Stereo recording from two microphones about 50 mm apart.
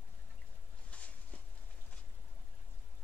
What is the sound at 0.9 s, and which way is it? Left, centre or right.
Vehicle, left.